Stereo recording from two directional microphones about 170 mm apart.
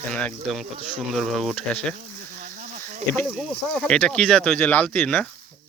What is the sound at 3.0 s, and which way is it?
Speech, 40° right (ahead or behind).